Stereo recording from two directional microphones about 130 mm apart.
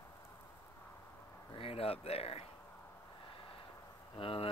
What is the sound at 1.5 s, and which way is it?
Speech, 45° left (ahead or behind).